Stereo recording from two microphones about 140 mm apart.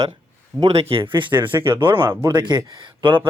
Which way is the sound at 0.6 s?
45° right (ahead or behind).